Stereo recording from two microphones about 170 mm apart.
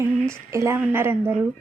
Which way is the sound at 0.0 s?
15° right (ahead or behind).